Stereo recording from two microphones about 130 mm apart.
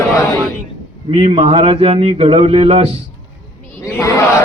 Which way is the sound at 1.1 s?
50° right (ahead or behind).